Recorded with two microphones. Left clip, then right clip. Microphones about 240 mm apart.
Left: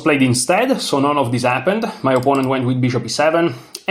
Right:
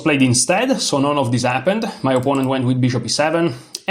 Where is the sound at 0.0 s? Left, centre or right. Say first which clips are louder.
Left 1 dB; right.